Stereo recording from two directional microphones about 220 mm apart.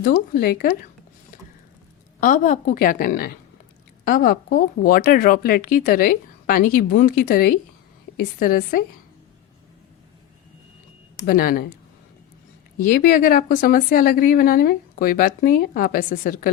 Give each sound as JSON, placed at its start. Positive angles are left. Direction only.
{"t": 0.0, "sound": "speech", "side_deg": 40}
{"t": 2.2, "sound": "speech", "side_deg": 35}
{"t": 11.3, "sound": "speech", "side_deg": 40}
{"t": 12.8, "sound": "speech", "side_deg": 40}